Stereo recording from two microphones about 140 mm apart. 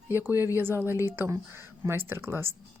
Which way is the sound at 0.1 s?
15° right (ahead or behind).